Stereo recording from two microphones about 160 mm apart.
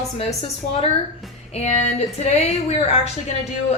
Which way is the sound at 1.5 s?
45° left (ahead or behind).